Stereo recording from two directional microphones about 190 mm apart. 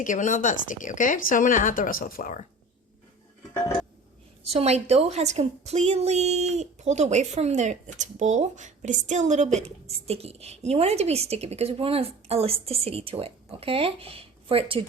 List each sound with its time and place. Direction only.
0.0 s speech: 40° left (ahead or behind)
4.4 s a woman's voice: 35° right (ahead or behind)